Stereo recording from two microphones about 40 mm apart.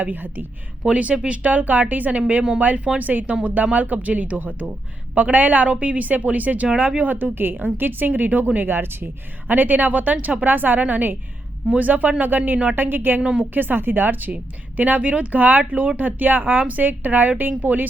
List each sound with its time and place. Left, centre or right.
0.0 s speech: right
0.9 s speech: right
8.5 s speech: right
9.5 s speech: right
13.2 s a woman's voice: right
13.5 s speech: right
14.8 s speech: right